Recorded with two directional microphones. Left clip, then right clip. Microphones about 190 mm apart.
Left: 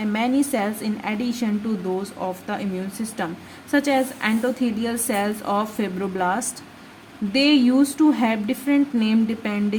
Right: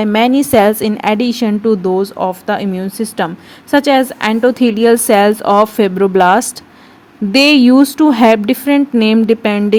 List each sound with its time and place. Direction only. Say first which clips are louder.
0.0 s a woman's voice: right 11 dB; 40° right (ahead or behind)